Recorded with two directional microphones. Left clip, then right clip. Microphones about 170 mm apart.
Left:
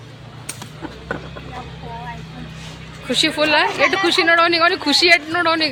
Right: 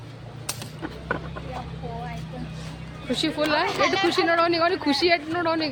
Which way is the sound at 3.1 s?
5° left (ahead or behind).